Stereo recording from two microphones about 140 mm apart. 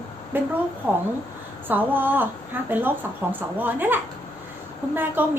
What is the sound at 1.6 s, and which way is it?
A woman's voice, 15° right (ahead or behind).